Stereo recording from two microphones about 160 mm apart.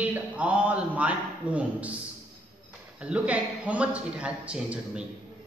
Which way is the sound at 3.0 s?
10° right (ahead or behind).